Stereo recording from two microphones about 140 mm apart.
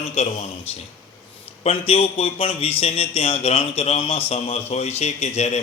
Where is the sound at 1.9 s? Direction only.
45° left (ahead or behind).